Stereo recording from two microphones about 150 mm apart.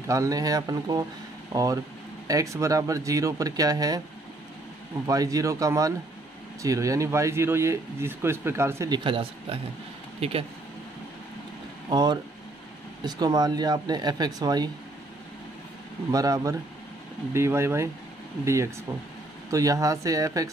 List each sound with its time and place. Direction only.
0.0 s speech: 20° right (ahead or behind)
5.0 s speech: 25° right (ahead or behind)
8.9 s speech: 35° right (ahead or behind)
11.9 s speech: 30° right (ahead or behind)
16.1 s speech: 25° right (ahead or behind)